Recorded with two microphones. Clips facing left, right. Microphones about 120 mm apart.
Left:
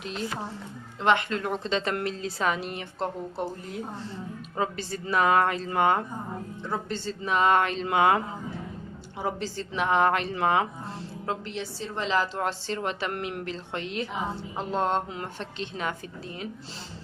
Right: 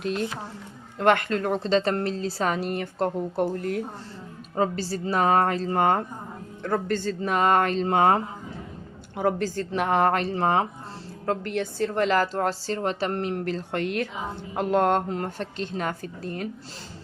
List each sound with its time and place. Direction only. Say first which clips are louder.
0.9 s a woman's voice: right 3 dB; 50° right (ahead or behind)
4.5 s speech: right 5 dB; 40° right (ahead or behind)
6.6 s a woman's voice: right 8 dB; 60° right (ahead or behind); by 8.2 s 40° right (ahead or behind)
9.1 s a woman's voice: right 6 dB; 50° right (ahead or behind)
11.3 s a woman's voice: right 6 dB; 50° right (ahead or behind)